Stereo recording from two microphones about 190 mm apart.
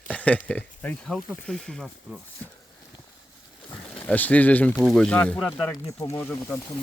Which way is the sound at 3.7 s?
10° left (ahead or behind).